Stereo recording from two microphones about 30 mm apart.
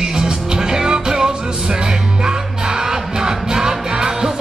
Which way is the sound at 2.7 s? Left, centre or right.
Centre.